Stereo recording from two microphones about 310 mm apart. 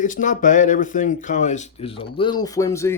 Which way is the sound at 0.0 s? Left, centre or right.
Left.